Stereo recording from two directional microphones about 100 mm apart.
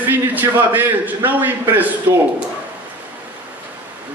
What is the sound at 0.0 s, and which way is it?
A man's voice, 20° right (ahead or behind).